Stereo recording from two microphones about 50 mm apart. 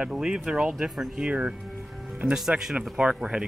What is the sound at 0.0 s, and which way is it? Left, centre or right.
Speech, centre.